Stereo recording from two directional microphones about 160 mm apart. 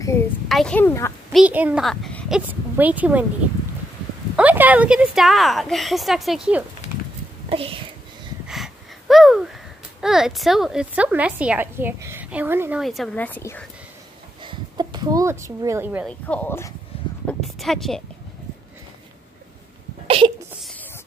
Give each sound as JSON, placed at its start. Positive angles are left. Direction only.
{"t": 0.5, "sound": "speech", "side_deg": 5}
{"t": 1.3, "sound": "a woman's voice", "side_deg": -10}
{"t": 1.9, "sound": "speech", "side_deg": 0}
{"t": 4.4, "sound": "a woman's voice", "side_deg": -10}
{"t": 7.4, "sound": "speech", "side_deg": -35}
{"t": 8.5, "sound": "a sound", "side_deg": 0}
{"t": 9.9, "sound": "a woman's voice", "side_deg": -5}
{"t": 12.8, "sound": "speech", "side_deg": 0}
{"t": 14.4, "sound": "speech", "side_deg": -30}
{"t": 16.3, "sound": "speech", "side_deg": 10}
{"t": 16.9, "sound": "a sound", "side_deg": 35}
{"t": 17.3, "sound": "a woman's voice", "side_deg": 0}
{"t": 20.1, "sound": "a sound", "side_deg": -35}